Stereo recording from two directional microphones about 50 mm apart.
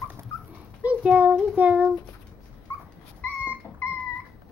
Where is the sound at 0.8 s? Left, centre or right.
Right.